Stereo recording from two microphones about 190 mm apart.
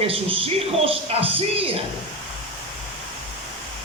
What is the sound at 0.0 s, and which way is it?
Speech, 30° right (ahead or behind).